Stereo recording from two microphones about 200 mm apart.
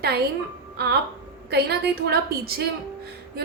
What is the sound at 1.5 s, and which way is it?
A woman's voice, 55° right (ahead or behind).